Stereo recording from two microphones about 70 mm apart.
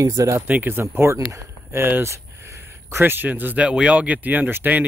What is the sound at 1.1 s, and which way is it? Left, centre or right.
Speech, right.